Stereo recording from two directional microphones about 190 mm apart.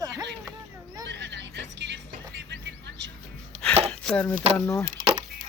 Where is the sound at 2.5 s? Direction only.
70° right (ahead or behind).